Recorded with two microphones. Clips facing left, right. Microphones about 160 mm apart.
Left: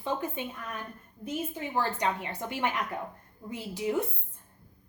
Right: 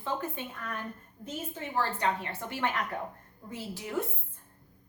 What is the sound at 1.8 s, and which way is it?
A woman's voice, 15° left (ahead or behind).